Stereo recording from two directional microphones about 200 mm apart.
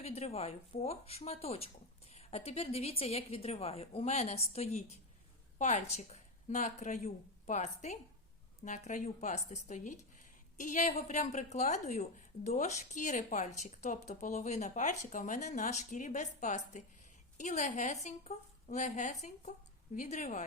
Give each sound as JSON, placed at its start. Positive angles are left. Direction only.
{"t": 0.0, "sound": "a woman's voice", "side_deg": 30}